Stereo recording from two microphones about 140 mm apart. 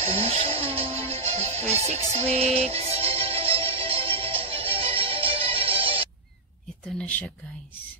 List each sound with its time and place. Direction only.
0.0 s music: 45° right (ahead or behind)
7.0 s speech: 10° left (ahead or behind)